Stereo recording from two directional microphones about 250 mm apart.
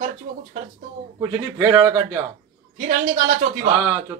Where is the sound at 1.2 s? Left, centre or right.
Centre.